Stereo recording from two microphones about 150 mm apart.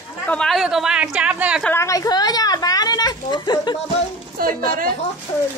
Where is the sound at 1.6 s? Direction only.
20° left (ahead or behind).